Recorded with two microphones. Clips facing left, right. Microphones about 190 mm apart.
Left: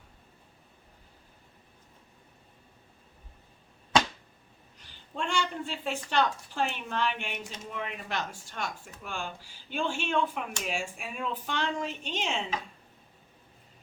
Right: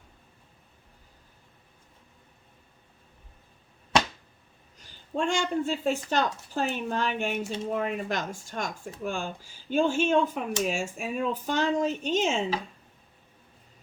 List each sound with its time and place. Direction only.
4.8 s speech: 45° right (ahead or behind)